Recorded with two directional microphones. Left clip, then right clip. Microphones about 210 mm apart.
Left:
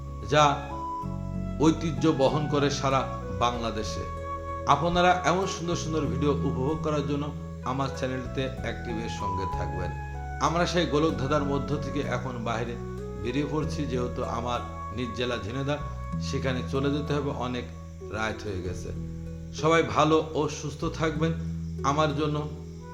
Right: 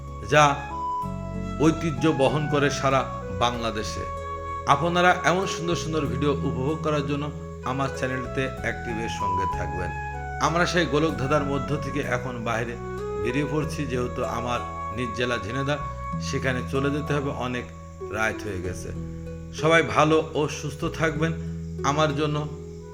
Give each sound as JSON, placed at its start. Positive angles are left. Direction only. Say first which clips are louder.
{"t": 0.3, "sound": "speech", "louder": "right 3 dB", "side_deg": -15}
{"t": 1.5, "sound": "speech", "louder": "right 2 dB", "side_deg": -15}